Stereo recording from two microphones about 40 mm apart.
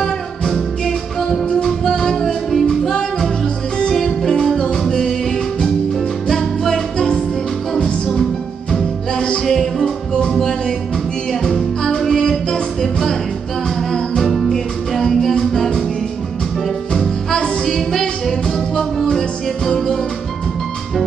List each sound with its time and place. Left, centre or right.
1.5 s music: centre
3.9 s music: centre
6.2 s music: centre
9.1 s music: centre